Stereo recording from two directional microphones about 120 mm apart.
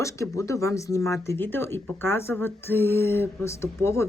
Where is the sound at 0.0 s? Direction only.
25° left (ahead or behind).